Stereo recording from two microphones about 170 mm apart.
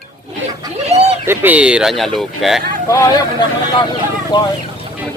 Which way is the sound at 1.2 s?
10° right (ahead or behind).